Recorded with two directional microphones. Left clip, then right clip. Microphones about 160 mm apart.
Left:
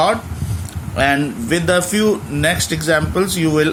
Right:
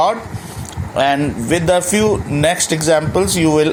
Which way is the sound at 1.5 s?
15° right (ahead or behind).